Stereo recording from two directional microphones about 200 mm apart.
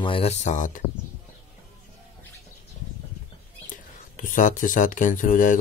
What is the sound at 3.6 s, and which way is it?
Speech, 40° left (ahead or behind).